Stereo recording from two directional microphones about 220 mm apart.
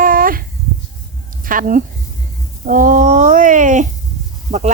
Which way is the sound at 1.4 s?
40° right (ahead or behind).